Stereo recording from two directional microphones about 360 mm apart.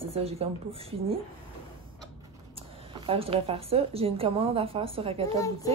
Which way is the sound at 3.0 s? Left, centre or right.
Centre.